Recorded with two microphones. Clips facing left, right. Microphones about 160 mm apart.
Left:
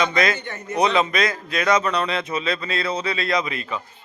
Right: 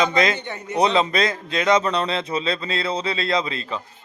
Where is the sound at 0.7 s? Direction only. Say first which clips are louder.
Right 1 dB; 30° right (ahead or behind).